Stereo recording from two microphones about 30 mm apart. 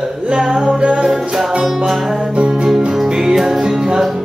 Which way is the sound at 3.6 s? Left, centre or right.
Right.